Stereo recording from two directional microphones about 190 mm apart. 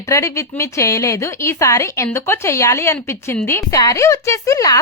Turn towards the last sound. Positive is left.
turn(degrees=15)  # may be behind; listen again after turning